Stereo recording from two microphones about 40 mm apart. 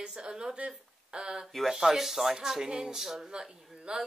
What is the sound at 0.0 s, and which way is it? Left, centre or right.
Speech, centre.